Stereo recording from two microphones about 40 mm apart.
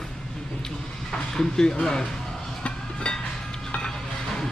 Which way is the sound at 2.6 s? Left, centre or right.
Left.